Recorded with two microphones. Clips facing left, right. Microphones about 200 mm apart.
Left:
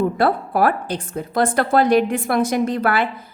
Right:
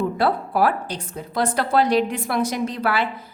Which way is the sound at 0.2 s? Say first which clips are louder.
Left 2 dB; 50° left (ahead or behind).